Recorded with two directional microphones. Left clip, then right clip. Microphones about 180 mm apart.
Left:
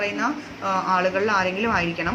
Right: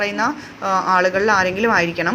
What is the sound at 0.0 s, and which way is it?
A woman's voice, 45° right (ahead or behind).